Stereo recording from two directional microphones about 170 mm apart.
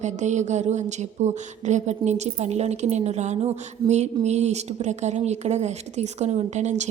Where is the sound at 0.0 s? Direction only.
45° right (ahead or behind).